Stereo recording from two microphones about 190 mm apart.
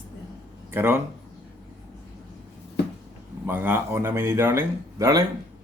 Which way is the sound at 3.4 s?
10° right (ahead or behind).